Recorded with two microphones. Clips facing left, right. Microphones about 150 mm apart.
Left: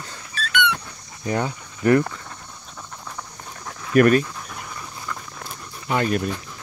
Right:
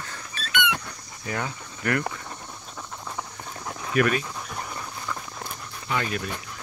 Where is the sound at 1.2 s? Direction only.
25° left (ahead or behind).